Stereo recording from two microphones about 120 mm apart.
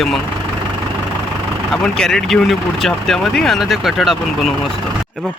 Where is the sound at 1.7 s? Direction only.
5° left (ahead or behind).